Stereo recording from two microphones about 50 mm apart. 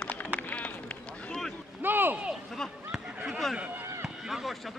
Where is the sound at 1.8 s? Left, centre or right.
Right.